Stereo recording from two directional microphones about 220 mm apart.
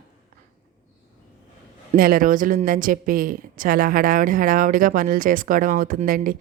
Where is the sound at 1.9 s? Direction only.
40° right (ahead or behind).